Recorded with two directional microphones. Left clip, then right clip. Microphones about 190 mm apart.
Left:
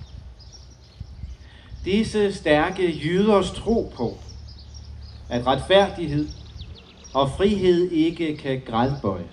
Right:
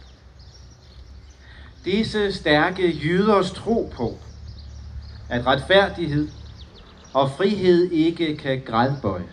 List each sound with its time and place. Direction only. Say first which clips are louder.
1.9 s speech: even; 5° right (ahead or behind)
5.3 s speech: right 1 dB; 5° right (ahead or behind)